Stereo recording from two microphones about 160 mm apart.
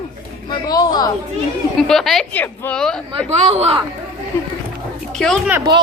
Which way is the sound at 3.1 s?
40° right (ahead or behind).